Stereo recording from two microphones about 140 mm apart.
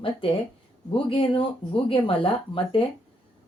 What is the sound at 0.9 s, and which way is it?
Speech, 40° left (ahead or behind).